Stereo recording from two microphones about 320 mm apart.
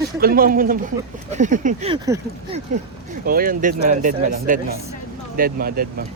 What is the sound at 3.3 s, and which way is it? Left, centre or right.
Speech, right.